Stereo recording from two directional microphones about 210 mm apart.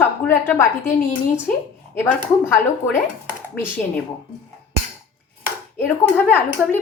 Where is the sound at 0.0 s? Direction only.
10° left (ahead or behind).